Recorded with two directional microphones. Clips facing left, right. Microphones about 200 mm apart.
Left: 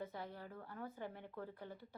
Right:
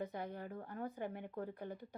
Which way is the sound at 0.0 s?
15° right (ahead or behind).